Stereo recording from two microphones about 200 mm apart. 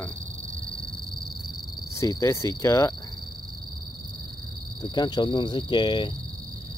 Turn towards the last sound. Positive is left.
turn(degrees=25)  # may be behind; listen again after turning